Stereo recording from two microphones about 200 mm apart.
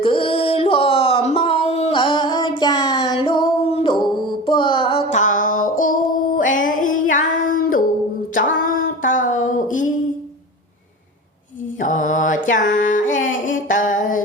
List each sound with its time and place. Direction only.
0.0 s music: 25° left (ahead or behind)
7.5 s a sound: 45° left (ahead or behind)
11.8 s mantra: 40° left (ahead or behind)